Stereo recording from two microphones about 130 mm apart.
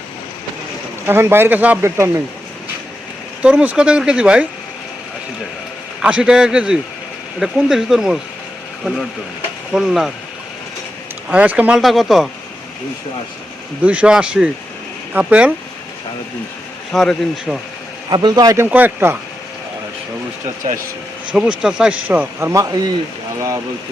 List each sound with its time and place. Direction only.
1.0 s speech: 15° right (ahead or behind)
3.4 s speech: 10° right (ahead or behind)
6.0 s speech: 10° right (ahead or behind)
9.7 s speech: centre (ahead or behind)
11.3 s speech: 10° right (ahead or behind)
11.8 s speech: centre (ahead or behind)
13.8 s speech: 10° right (ahead or behind)
16.9 s speech: centre (ahead or behind)
18.1 s a man's voice: 30° right (ahead or behind)
18.5 s speech: 15° right (ahead or behind)
21.3 s speech: 5° right (ahead or behind); by 22.9 s 25° right (ahead or behind)